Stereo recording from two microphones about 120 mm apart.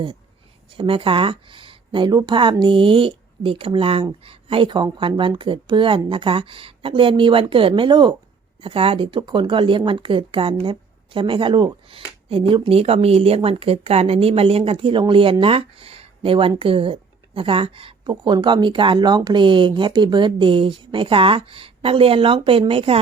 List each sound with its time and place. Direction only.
0.7 s speech: 45° right (ahead or behind)
8.6 s speech: 50° right (ahead or behind)